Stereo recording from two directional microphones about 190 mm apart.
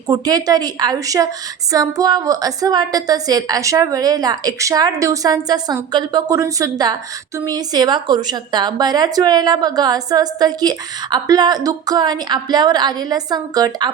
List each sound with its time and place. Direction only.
0.1 s a woman's voice: 20° right (ahead or behind)